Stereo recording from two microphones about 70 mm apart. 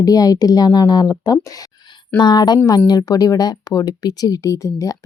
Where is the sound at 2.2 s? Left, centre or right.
Left.